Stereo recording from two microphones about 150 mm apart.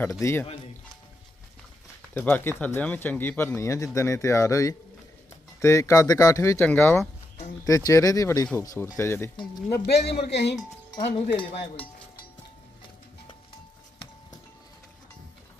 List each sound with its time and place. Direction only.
0.0 s speech: 20° left (ahead or behind)
2.1 s speech: 15° left (ahead or behind)
9.9 s a man's voice: 90° left
10.9 s speech: 35° left (ahead or behind)